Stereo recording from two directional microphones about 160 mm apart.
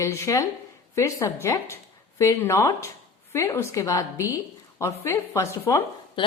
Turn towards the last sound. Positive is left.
turn(degrees=30)  # may be behind; listen again after turning